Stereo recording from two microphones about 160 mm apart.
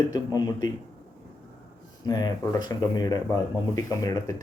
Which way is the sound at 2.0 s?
25° left (ahead or behind).